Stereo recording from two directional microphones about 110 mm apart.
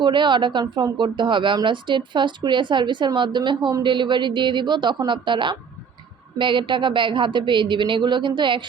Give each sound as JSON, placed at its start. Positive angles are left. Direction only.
{"t": 0.0, "sound": "a woman's voice", "side_deg": -45}
{"t": 0.6, "sound": "speech", "side_deg": -30}
{"t": 0.9, "sound": "a woman's voice", "side_deg": -45}